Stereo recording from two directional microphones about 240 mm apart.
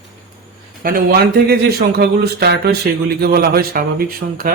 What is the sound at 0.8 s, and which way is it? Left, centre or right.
Speech, right.